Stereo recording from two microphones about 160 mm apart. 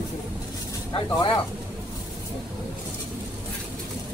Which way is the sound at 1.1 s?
30° left (ahead or behind).